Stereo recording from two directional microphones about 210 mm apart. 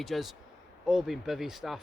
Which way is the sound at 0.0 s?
Centre (ahead or behind).